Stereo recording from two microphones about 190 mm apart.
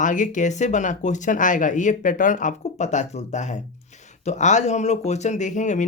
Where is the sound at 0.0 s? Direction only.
40° left (ahead or behind).